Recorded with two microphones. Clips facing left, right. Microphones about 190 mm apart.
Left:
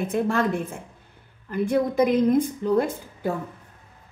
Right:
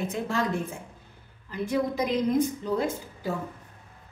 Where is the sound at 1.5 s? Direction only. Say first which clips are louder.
Left 5 dB; 55° left (ahead or behind).